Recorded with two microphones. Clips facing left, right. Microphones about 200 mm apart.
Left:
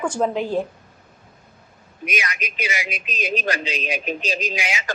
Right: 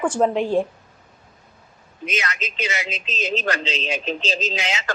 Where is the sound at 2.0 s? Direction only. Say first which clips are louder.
Right 1 dB; 15° left (ahead or behind).